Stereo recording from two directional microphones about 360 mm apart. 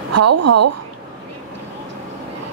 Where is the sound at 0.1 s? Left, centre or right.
Right.